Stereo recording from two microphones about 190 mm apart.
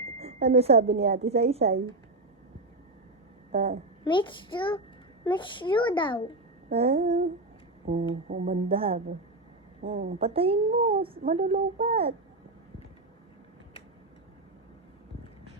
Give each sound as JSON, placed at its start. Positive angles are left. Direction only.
{"t": 0.2, "sound": "speech", "side_deg": -35}
{"t": 3.5, "sound": "a child's voice", "side_deg": -30}
{"t": 4.0, "sound": "a child's voice", "side_deg": 25}
{"t": 6.7, "sound": "speech", "side_deg": -30}